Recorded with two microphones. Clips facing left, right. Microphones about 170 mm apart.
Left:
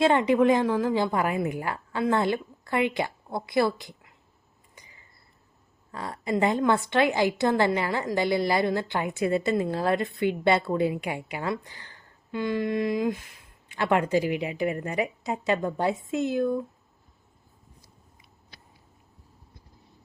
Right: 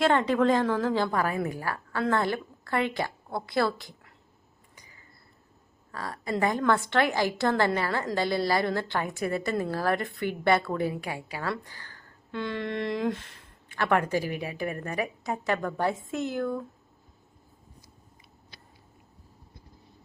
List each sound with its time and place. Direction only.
0.0 s a woman's voice: 15° left (ahead or behind)
5.9 s a woman's voice: 20° left (ahead or behind)